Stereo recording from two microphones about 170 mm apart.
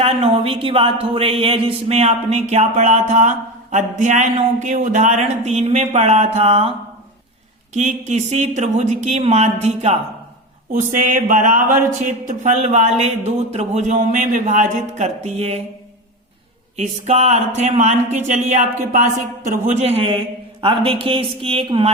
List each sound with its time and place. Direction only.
0.0 s speech: 35° right (ahead or behind)
7.7 s speech: 45° right (ahead or behind)
10.7 s speech: 50° right (ahead or behind)
16.7 s speech: 40° right (ahead or behind)